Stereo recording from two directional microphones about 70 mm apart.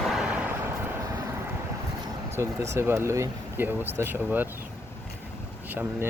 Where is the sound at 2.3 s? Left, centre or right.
Right.